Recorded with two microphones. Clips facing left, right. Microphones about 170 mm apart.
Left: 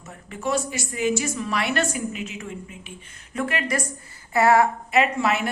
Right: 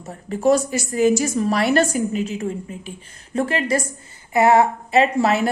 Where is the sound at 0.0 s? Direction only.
35° right (ahead or behind).